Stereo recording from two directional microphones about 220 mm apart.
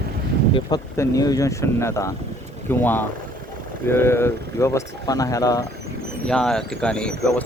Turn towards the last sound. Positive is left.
turn(degrees=5)  # may be behind; listen again after turning